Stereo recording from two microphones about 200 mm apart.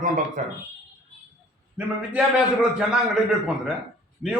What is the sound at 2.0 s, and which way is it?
A man's voice, 5° right (ahead or behind).